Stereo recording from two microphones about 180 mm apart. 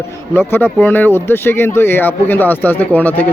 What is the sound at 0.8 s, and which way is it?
Speech, 10° left (ahead or behind).